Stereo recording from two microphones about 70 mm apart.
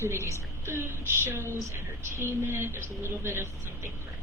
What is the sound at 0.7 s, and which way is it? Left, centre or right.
Speech, right.